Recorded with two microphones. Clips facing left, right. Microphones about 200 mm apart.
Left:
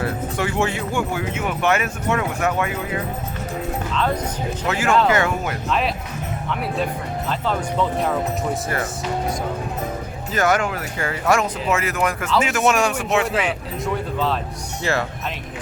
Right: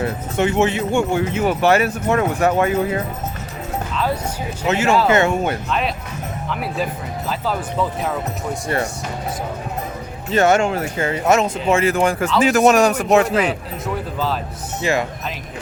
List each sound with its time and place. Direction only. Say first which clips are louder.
0.0 s speech: right 4 dB; 20° right (ahead or behind)
1.2 s speech: right 5 dB; 35° right (ahead or behind)
4.6 s speech: right 2 dB; 25° right (ahead or behind)
6.5 s speech: even; centre (ahead or behind)
10.3 s speech: right 5 dB; 25° right (ahead or behind)
13.5 s speech: even; centre (ahead or behind)
14.8 s speech: right 3 dB; 15° right (ahead or behind)